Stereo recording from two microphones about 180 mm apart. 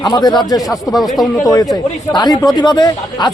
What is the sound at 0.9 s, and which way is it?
Speech, centre (ahead or behind).